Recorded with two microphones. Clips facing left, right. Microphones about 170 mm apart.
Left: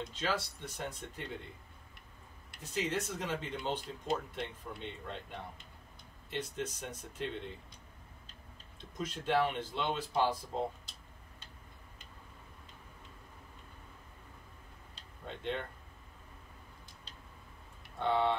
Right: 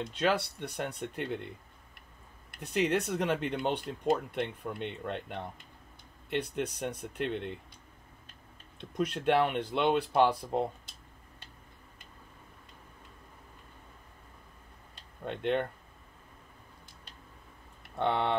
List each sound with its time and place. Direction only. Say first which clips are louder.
0.1 s speech: right 9 dB; 65° right (ahead or behind)
2.6 s speech: right 7 dB; 65° right (ahead or behind)
8.9 s speech: right 5 dB; 65° right (ahead or behind)
15.2 s speech: right 8 dB; 65° right (ahead or behind)
17.9 s speech: right 1 dB; 65° right (ahead or behind)